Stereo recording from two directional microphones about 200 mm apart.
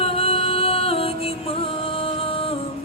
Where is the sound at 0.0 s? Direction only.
30° left (ahead or behind).